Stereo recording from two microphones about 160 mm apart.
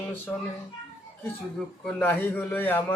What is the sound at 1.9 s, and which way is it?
Speech, 10° left (ahead or behind).